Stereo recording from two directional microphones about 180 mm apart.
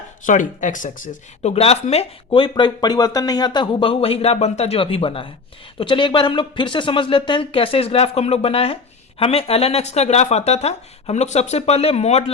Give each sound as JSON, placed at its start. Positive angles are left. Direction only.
{"t": 0.3, "sound": "speech", "side_deg": 45}